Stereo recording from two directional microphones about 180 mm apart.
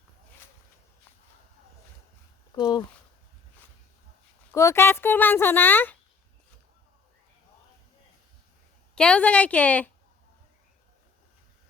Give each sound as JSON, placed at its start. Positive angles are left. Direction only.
{"t": 2.6, "sound": "speech", "side_deg": 25}
{"t": 4.5, "sound": "speech", "side_deg": 15}
{"t": 9.0, "sound": "speech", "side_deg": 5}